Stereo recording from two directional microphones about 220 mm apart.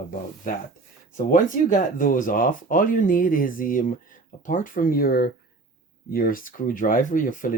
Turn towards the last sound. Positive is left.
turn(degrees=35)  # may be behind; listen again after turning